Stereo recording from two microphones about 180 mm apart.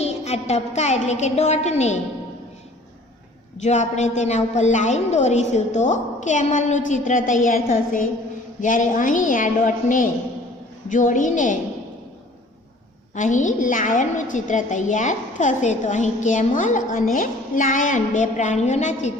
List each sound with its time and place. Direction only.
0.0 s a woman's voice: 35° left (ahead or behind)
3.6 s a woman's voice: 40° left (ahead or behind)
13.1 s a woman's voice: 45° left (ahead or behind)